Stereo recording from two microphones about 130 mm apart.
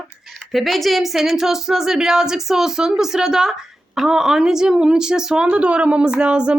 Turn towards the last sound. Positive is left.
turn(degrees=-10)  # may be behind; listen again after turning